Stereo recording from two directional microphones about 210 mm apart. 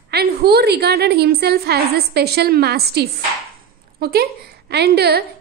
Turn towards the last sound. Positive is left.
turn(degrees=-50)  # may be behind; listen again after turning